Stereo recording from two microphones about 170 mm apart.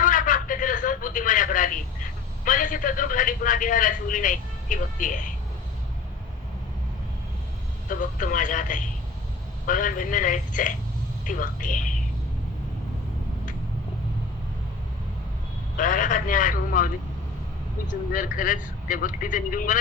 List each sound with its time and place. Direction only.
0.0 s telephone: 50° left (ahead or behind)
2.4 s a man's voice: 50° left (ahead or behind)
7.9 s a man's voice: 50° left (ahead or behind)
15.8 s a man's voice: 50° left (ahead or behind)
18.1 s a man's voice: 50° left (ahead or behind)